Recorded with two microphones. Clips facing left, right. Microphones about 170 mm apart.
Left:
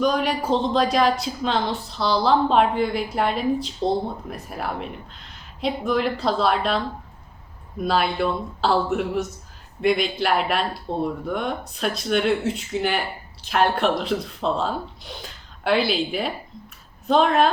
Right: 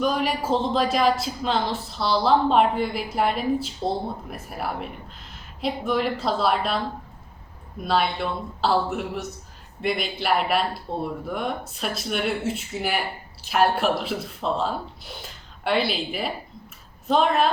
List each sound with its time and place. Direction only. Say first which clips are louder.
0.0 s a woman's voice: left 2 dB; centre (ahead or behind)
7.9 s speech: left 2 dB; centre (ahead or behind)